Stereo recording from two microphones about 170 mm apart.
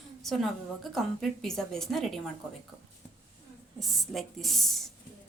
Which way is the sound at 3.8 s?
Centre (ahead or behind).